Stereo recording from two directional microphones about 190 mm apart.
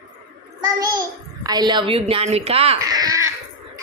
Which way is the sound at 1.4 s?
20° right (ahead or behind).